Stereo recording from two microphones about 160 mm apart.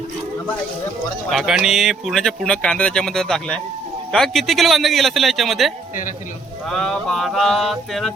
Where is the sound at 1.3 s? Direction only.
Centre (ahead or behind).